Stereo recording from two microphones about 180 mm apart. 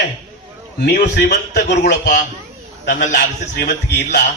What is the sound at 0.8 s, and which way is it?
Speech, 60° left (ahead or behind).